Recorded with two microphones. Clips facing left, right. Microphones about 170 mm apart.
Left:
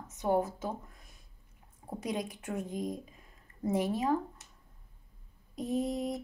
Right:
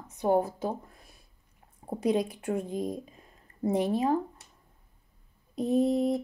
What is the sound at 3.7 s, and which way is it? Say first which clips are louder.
Speech: right 4 dB; 35° right (ahead or behind).